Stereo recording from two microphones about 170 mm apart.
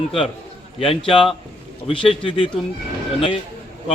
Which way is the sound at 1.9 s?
30° left (ahead or behind).